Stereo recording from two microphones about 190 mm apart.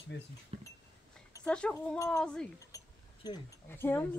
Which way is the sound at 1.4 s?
5° left (ahead or behind).